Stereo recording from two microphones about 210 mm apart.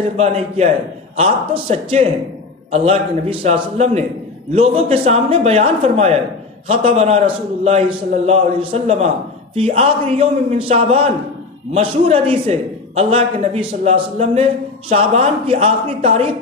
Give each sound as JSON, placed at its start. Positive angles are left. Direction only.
{"t": 0.2, "sound": "a man's voice", "side_deg": -30}